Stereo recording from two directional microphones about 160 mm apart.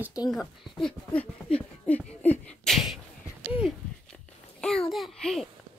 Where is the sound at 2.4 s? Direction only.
Centre (ahead or behind).